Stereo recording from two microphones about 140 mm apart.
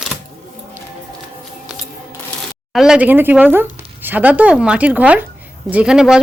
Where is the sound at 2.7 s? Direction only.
5° right (ahead or behind).